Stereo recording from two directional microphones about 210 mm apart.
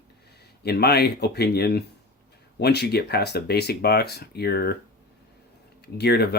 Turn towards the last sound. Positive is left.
turn(degrees=50)  # may be behind; listen again after turning